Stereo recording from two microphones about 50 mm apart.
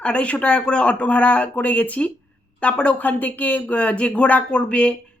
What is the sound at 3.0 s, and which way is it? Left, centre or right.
Speech, left.